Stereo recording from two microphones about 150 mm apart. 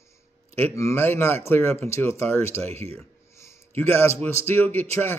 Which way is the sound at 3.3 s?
15° left (ahead or behind).